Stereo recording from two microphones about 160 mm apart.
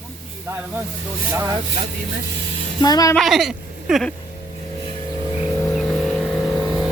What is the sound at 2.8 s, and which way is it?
Speech, 25° left (ahead or behind).